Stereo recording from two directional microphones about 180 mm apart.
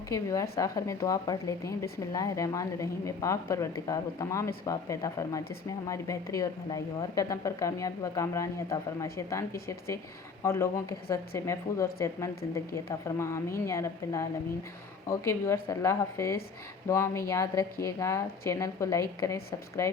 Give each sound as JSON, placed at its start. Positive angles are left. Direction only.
{"t": 0.1, "sound": "a woman's voice", "side_deg": 15}